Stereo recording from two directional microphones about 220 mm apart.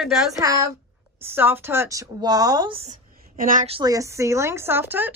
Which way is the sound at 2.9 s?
35° right (ahead or behind).